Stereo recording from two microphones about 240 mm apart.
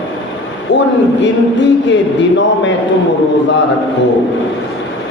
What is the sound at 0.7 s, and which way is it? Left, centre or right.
A man's voice, left.